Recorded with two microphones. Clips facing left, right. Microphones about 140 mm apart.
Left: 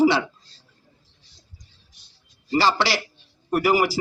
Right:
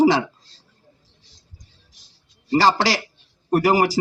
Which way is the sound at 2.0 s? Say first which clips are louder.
Right 2 dB; 90° right.